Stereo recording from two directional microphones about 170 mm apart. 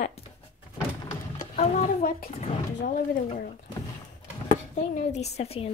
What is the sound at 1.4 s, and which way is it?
Speech, 45° left (ahead or behind).